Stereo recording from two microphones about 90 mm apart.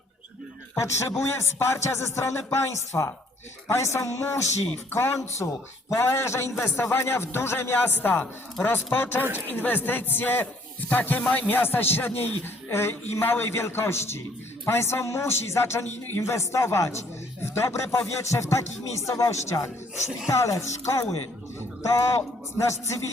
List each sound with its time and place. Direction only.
0.8 s a man's voice: 30° left (ahead or behind)
22.5 s a man's voice: 35° left (ahead or behind)